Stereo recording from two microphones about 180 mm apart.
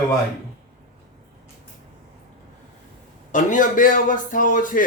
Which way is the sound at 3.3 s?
45° left (ahead or behind).